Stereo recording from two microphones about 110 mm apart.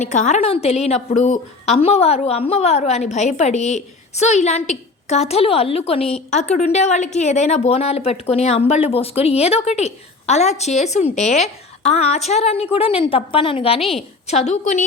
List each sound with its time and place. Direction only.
0.0 s a woman's voice: 90° left; by 13.8 s 60° left (ahead or behind)
14.3 s a woman's voice: 90° left